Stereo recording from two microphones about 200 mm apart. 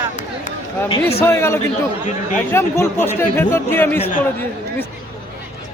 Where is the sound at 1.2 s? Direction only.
15° left (ahead or behind).